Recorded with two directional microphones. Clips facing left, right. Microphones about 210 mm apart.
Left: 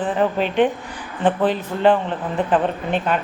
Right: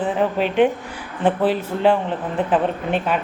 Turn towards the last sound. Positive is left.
turn(degrees=-5)  # may be behind; listen again after turning